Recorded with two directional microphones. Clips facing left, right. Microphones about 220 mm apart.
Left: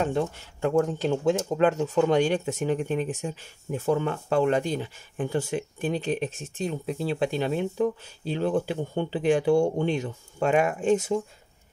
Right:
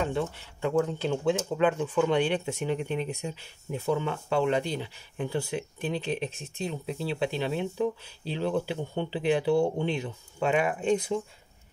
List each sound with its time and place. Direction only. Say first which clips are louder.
0.0 s speech: left 3 dB; 45° left (ahead or behind)